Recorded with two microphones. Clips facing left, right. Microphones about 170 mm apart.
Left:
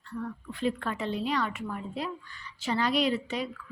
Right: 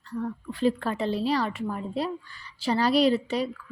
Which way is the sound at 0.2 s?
35° right (ahead or behind).